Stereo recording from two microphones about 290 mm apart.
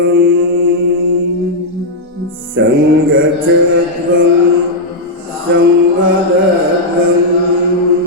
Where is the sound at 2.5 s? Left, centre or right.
Right.